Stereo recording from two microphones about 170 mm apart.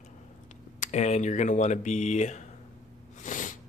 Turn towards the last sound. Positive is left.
turn(degrees=50)  # may be behind; listen again after turning